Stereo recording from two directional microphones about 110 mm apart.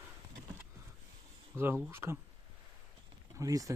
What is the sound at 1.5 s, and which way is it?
Speech, 20° right (ahead or behind).